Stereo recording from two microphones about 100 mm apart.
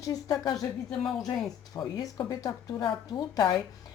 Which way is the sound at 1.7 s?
35° left (ahead or behind).